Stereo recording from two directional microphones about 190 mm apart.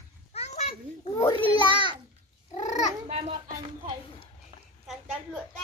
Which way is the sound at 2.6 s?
35° left (ahead or behind).